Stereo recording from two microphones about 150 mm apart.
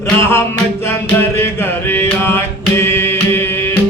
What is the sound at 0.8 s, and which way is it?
Music, 15° left (ahead or behind).